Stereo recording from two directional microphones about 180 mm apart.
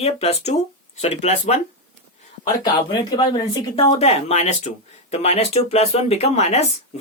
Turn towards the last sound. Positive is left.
turn(degrees=40)  # may be behind; listen again after turning